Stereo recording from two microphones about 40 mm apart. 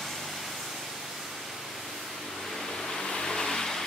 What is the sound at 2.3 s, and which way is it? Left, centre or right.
Vehicle, centre.